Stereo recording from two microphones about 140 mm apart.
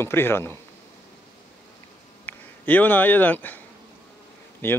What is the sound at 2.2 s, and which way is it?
Speech, 15° left (ahead or behind).